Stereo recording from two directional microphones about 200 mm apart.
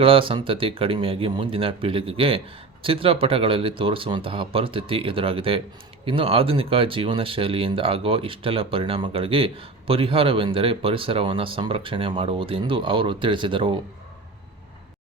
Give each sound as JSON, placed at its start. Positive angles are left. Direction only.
{"t": 0.0, "sound": "speech", "side_deg": -25}